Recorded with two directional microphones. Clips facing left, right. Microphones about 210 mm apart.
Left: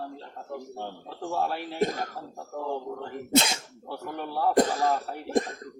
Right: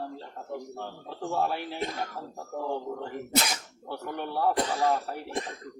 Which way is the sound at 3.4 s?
25° left (ahead or behind).